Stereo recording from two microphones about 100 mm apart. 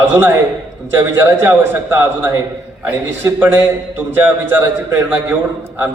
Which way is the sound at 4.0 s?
20° right (ahead or behind).